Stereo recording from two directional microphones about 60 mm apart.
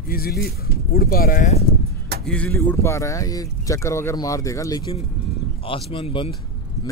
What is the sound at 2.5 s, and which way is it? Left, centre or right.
Speech, left.